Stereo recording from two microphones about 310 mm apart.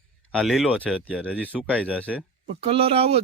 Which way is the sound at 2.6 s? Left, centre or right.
Centre.